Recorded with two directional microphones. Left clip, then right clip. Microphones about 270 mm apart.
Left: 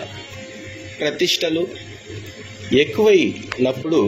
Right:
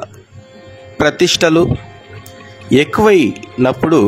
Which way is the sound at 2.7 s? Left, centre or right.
Right.